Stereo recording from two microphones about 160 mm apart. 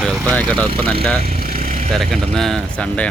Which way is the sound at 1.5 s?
60° right (ahead or behind).